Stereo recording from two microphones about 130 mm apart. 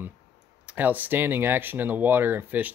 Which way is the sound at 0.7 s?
15° right (ahead or behind).